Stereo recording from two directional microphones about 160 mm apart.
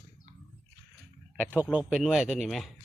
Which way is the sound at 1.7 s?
5° right (ahead or behind).